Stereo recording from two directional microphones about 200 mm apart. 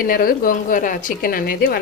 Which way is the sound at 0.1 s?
45° left (ahead or behind).